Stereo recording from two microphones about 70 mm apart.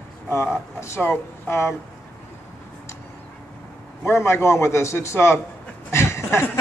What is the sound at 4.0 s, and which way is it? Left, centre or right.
A man's voice, left.